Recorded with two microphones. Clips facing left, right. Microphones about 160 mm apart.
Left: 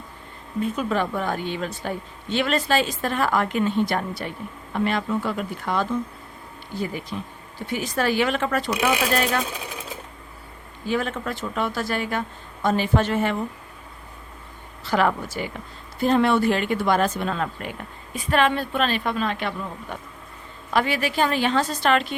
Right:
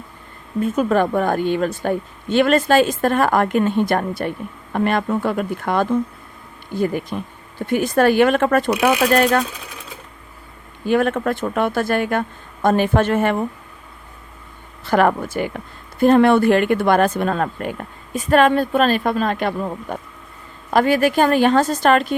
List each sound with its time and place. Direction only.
0.6 s a woman's voice: 50° right (ahead or behind)
10.8 s a woman's voice: 55° right (ahead or behind)
14.8 s a woman's voice: 50° right (ahead or behind)